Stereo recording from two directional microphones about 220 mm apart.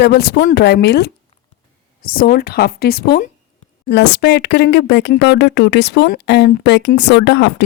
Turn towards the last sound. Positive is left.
turn(degrees=50)  # may be behind; listen again after turning